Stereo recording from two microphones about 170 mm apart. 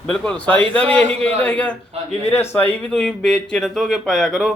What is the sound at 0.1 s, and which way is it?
A man's voice, 5° left (ahead or behind).